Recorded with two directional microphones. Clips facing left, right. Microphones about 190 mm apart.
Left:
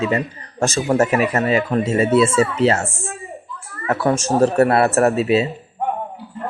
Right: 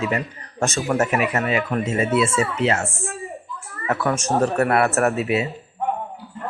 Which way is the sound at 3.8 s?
30° left (ahead or behind).